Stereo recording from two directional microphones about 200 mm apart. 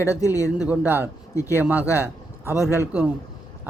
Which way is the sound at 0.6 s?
10° right (ahead or behind).